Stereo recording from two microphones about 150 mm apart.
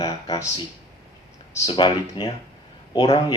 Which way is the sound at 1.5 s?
30° left (ahead or behind).